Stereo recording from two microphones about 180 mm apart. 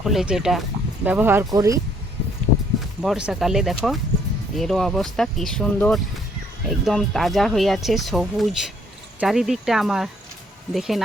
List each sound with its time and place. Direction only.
0.0 s speech: centre (ahead or behind); by 1.8 s 20° right (ahead or behind)
3.0 s speech: 5° right (ahead or behind)